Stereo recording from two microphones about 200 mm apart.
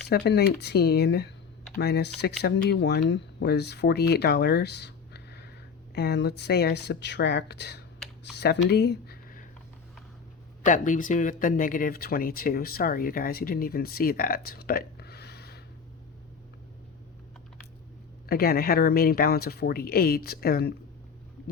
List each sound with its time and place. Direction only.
0.1 s speech: 55° left (ahead or behind)
8.2 s a sound: 55° left (ahead or behind)
10.7 s speech: 40° left (ahead or behind)
18.3 s speech: 50° left (ahead or behind)